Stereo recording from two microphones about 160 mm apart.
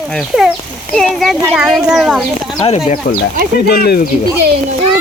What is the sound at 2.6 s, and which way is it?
Speech, 40° left (ahead or behind).